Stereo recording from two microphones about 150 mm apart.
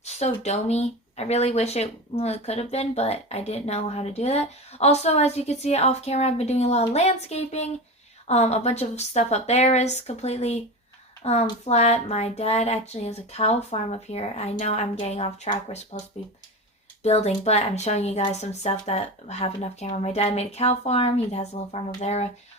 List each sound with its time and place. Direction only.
0.0 s a child's voice: 45° left (ahead or behind)